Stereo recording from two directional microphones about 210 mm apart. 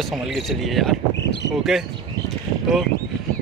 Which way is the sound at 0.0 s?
Centre (ahead or behind).